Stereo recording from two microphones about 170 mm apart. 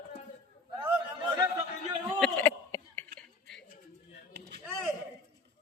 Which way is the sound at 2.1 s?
5° left (ahead or behind).